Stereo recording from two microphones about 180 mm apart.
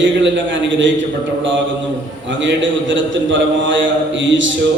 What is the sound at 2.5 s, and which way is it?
Speech, 90° right.